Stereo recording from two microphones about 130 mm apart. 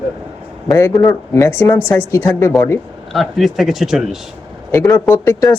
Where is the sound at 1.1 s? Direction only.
20° left (ahead or behind).